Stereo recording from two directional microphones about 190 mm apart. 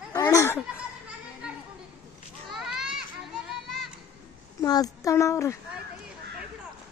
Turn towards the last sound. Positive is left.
turn(degrees=15)  # may be behind; listen again after turning